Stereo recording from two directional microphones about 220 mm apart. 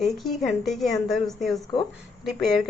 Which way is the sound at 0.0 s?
Centre (ahead or behind).